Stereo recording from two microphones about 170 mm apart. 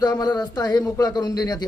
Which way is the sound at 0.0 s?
20° left (ahead or behind).